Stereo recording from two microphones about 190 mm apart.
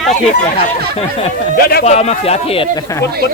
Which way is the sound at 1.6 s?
55° left (ahead or behind).